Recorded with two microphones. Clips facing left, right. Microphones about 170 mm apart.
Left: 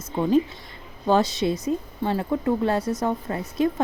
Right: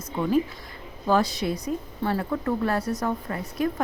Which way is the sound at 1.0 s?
25° left (ahead or behind).